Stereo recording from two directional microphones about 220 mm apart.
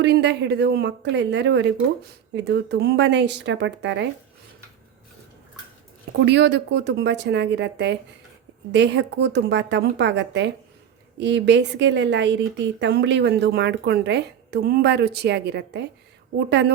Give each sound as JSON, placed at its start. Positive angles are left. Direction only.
{"t": 0.0, "sound": "a woman's voice", "side_deg": -50}
{"t": 6.1, "sound": "a woman's voice", "side_deg": -50}